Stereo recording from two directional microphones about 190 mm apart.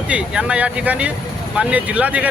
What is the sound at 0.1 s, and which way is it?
Speech, 5° right (ahead or behind).